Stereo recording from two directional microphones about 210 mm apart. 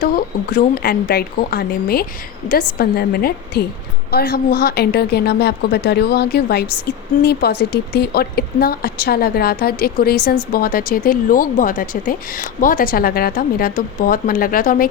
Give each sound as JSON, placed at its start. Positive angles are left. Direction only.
{"t": 0.0, "sound": "a woman's voice", "side_deg": 40}